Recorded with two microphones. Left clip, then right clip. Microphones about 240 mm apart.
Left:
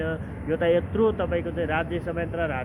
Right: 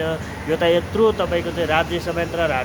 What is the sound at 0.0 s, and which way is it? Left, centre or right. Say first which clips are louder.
Speech: right 6 dB; right.